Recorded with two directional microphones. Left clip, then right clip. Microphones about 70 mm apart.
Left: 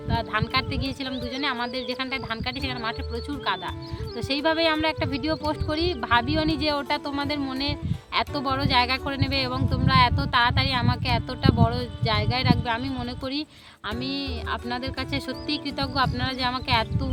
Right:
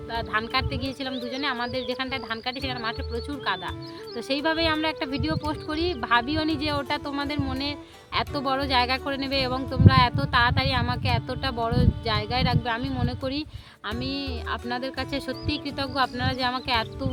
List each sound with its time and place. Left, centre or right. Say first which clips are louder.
0.1 s speech: left 1 dB; left
4.3 s speech: left 2 dB; left